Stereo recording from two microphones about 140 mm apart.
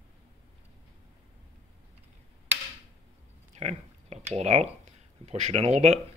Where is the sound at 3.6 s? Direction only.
50° right (ahead or behind).